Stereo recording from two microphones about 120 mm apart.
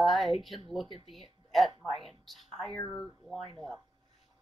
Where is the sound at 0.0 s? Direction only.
Centre (ahead or behind).